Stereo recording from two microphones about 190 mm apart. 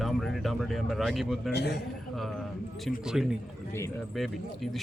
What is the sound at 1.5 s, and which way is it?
Speech, 60° left (ahead or behind).